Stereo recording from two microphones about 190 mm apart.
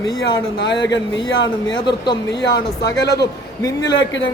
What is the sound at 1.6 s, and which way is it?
Speech, 20° left (ahead or behind).